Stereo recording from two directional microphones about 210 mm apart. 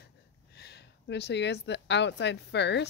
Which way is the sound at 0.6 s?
50° left (ahead or behind).